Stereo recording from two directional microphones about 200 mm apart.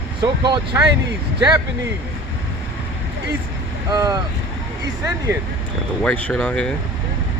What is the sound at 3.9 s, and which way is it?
Speech, 20° right (ahead or behind).